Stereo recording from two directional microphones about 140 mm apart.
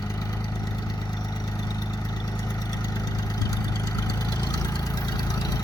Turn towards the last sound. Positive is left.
turn(degrees=25)  # may be behind; listen again after turning